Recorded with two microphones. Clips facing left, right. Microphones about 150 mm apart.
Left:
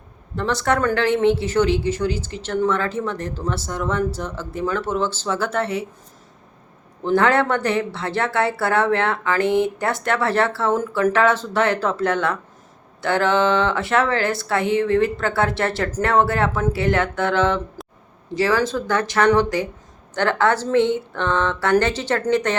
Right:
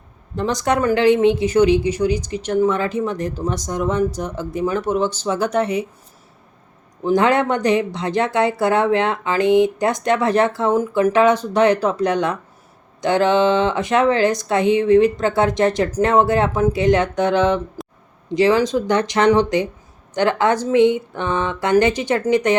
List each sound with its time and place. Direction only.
0.3 s a woman's voice: 15° right (ahead or behind)
7.0 s a woman's voice: 15° right (ahead or behind)